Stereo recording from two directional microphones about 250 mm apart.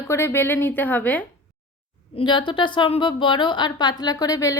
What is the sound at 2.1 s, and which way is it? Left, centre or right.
A woman's voice, centre.